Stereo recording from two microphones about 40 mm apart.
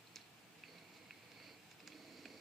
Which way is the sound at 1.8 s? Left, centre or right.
Centre.